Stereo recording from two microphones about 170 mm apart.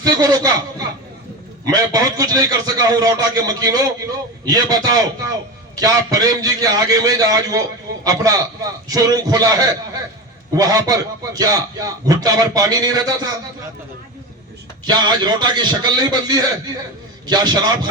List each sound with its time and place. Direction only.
0.0 s a man's voice: 20° right (ahead or behind)
1.6 s a man's voice: 20° right (ahead or behind)
14.8 s a man's voice: 25° right (ahead or behind)